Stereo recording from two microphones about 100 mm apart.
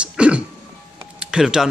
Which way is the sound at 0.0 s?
10° right (ahead or behind).